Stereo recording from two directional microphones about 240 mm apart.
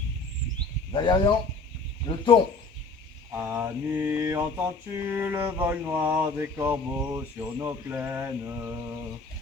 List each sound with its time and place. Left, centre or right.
0.9 s speech: centre
3.3 s mantra: centre